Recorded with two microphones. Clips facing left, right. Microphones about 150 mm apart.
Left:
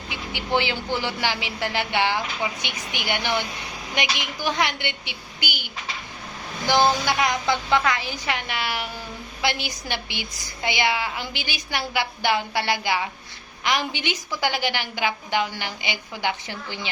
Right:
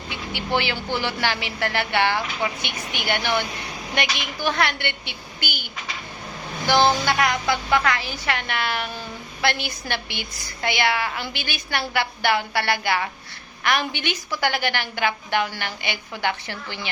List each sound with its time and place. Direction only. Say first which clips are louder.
0.1 s a man's voice: even; 15° left (ahead or behind)